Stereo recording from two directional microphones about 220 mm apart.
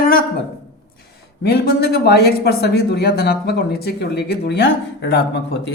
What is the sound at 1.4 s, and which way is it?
Speech, 50° left (ahead or behind).